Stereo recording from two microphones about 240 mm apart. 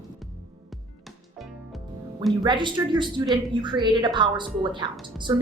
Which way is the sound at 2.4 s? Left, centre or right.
Centre.